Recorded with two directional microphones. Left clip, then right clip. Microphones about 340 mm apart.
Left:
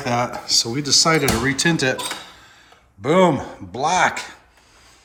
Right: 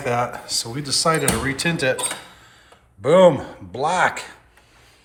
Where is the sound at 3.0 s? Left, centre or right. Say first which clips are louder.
Right 3 dB; centre.